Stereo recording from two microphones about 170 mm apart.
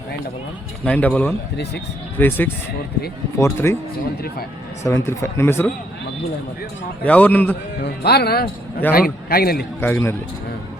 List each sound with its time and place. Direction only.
0.9 s speech: 10° left (ahead or behind)
4.8 s speech: 15° left (ahead or behind)
7.0 s speech: 10° left (ahead or behind)
7.8 s a man's voice: 70° left (ahead or behind)
9.8 s speech: 15° left (ahead or behind)